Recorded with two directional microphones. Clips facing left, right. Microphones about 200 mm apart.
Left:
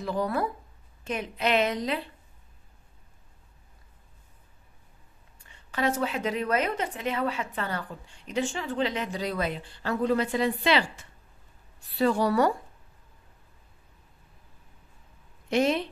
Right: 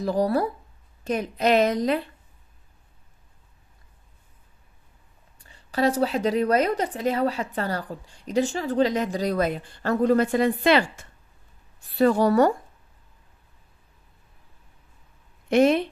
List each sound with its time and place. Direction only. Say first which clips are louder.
0.0 s a woman's voice: right 6 dB; 35° right (ahead or behind)
5.4 s a woman's voice: right 6 dB; 35° right (ahead or behind)
15.5 s speech: right 6 dB; 55° right (ahead or behind)